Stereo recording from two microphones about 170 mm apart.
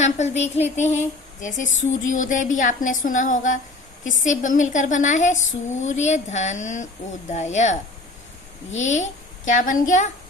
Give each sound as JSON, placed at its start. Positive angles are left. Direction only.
{"t": 0.0, "sound": "speech", "side_deg": 40}
{"t": 0.5, "sound": "a sound", "side_deg": 40}
{"t": 8.7, "sound": "a child's voice", "side_deg": 45}